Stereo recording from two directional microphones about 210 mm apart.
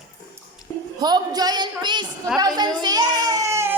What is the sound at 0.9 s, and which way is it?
A man's voice, 20° right (ahead or behind).